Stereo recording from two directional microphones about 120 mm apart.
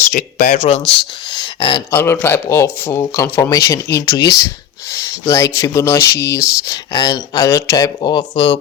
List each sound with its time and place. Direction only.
0.1 s speech: 90° left
1.3 s speech: 40° left (ahead or behind)
1.9 s rub: 20° left (ahead or behind)
3.2 s speech: 15° left (ahead or behind)
3.5 s rub: 30° left (ahead or behind)
8.0 s speech: 40° left (ahead or behind)